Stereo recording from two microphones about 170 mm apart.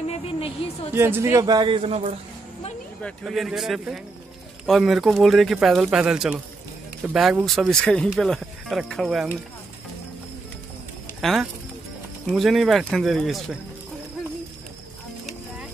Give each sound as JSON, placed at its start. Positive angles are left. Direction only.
{"t": 0.6, "sound": "a woman's voice", "side_deg": 35}
{"t": 0.9, "sound": "speech", "side_deg": -15}
{"t": 3.0, "sound": "speech", "side_deg": 5}
{"t": 11.1, "sound": "speech", "side_deg": 0}